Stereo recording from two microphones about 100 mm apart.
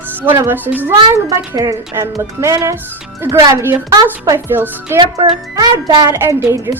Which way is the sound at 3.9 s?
35° right (ahead or behind).